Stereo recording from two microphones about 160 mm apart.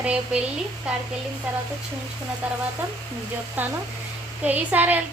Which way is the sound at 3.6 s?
10° right (ahead or behind).